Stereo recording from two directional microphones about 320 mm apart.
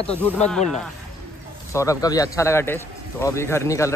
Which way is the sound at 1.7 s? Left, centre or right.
Centre.